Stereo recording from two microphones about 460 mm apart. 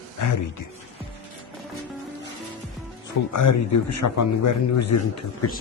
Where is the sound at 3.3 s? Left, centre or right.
Left.